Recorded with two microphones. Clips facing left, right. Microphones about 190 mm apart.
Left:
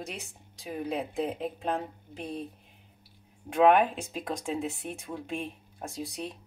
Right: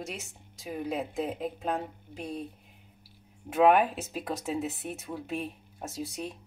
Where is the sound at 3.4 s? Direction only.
5° right (ahead or behind).